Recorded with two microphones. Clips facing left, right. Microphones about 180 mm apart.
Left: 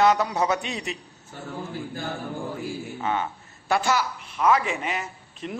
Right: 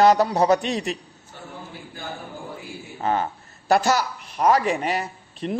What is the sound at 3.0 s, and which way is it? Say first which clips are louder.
Speech: right 5 dB; 35° right (ahead or behind).